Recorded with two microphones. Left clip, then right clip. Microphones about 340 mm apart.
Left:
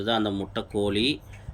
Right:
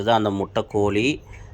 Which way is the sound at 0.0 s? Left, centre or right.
Centre.